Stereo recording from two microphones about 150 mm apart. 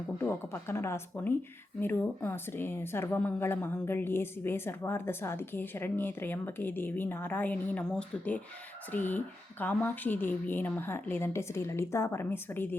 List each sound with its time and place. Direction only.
0.2 s a woman's voice: 15° left (ahead or behind)